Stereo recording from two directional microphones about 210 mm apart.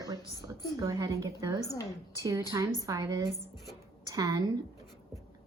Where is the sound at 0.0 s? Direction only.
15° right (ahead or behind).